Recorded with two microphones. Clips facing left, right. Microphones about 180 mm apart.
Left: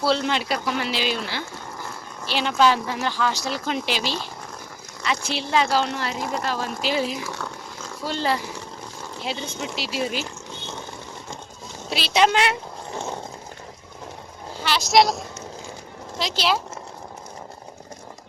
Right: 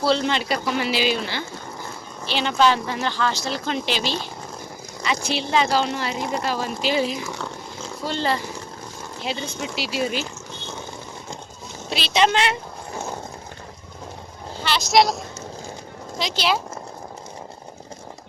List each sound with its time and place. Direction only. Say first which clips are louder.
0.0 s speech: right 1 dB; 5° left (ahead or behind)
5.3 s speech: right 1 dB; centre (ahead or behind)
7.3 s a sound: right 2 dB; 25° right (ahead or behind)
8.0 s speech: even; 5° left (ahead or behind)
11.9 s speech: even; 5° left (ahead or behind)
14.6 s a sound: even; 10° left (ahead or behind)
16.1 s speech: even; 5° left (ahead or behind)